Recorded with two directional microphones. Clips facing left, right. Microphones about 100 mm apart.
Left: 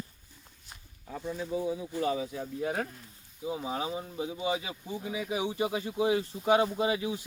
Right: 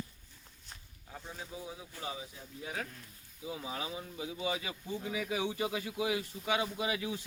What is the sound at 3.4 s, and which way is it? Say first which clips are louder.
Speech: left 7 dB; 30° left (ahead or behind).